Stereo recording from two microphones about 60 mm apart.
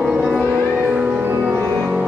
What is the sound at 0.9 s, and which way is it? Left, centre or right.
Music, centre.